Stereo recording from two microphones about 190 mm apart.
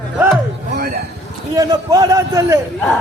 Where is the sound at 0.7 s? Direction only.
50° right (ahead or behind).